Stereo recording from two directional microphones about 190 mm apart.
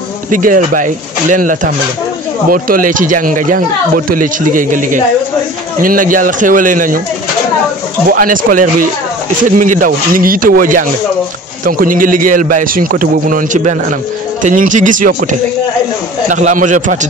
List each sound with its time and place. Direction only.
0.3 s a man's voice: 45° right (ahead or behind)
8.1 s a man's voice: 45° right (ahead or behind)
16.3 s a man's voice: 40° right (ahead or behind)